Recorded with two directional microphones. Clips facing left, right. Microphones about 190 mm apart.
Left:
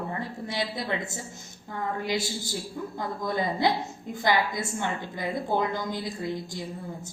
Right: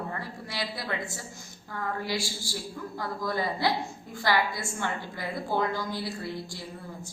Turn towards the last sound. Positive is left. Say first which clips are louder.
# left 4 dB
turn(degrees=20)  # may be behind; listen again after turning